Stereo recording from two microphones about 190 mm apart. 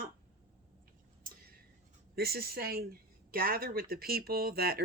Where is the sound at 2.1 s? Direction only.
55° right (ahead or behind).